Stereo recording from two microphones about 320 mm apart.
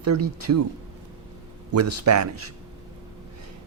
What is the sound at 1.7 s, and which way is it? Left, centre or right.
Speech, right.